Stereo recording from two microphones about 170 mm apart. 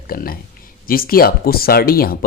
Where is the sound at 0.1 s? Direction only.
60° left (ahead or behind).